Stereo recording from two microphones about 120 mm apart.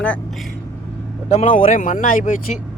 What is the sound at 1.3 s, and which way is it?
Speech, 60° left (ahead or behind).